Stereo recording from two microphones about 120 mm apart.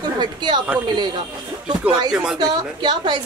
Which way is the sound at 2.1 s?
5° right (ahead or behind).